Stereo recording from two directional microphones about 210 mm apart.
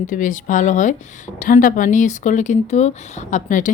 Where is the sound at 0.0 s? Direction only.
40° left (ahead or behind).